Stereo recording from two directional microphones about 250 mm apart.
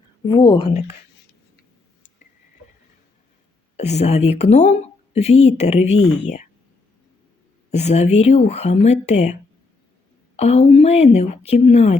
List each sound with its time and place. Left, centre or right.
0.3 s a woman's voice: centre
3.8 s a woman's voice: left
7.7 s a woman's voice: left
10.3 s a woman's voice: left